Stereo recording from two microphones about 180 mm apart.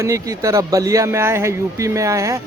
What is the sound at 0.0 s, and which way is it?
Speech, 15° right (ahead or behind).